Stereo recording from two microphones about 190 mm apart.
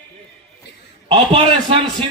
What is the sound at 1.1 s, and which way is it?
Speech, 30° right (ahead or behind).